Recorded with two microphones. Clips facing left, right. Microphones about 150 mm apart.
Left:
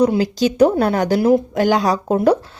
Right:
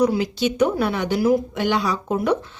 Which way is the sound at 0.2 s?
35° left (ahead or behind).